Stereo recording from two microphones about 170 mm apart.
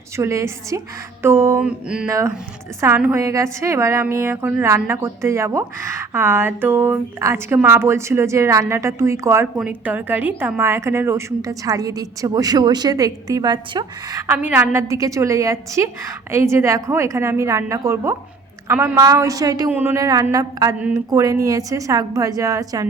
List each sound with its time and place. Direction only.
0.2 s a woman's voice: 15° right (ahead or behind)
2.0 s a woman's voice: 15° right (ahead or behind)
20.7 s a woman's voice: 10° right (ahead or behind)
21.1 s a woman's voice: 20° right (ahead or behind)